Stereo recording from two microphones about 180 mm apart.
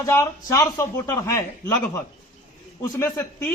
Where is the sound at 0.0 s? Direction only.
20° left (ahead or behind).